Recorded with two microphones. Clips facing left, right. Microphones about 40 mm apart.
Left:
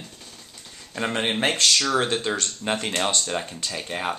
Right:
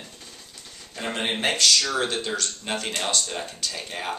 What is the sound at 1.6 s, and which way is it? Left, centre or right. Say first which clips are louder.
Speech: even; left.